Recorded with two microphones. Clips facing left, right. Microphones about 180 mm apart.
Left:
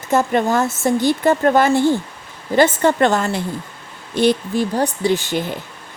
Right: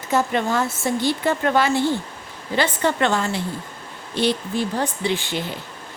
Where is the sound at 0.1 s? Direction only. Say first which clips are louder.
Left 4 dB; 45° left (ahead or behind).